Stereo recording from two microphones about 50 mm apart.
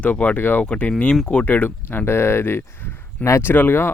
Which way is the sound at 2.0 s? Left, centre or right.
Left.